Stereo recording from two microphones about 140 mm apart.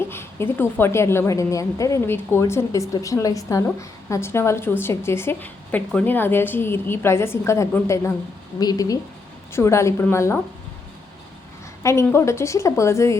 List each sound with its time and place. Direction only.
0.1 s a woman's voice: 15° left (ahead or behind)
11.8 s a woman's voice: 20° left (ahead or behind)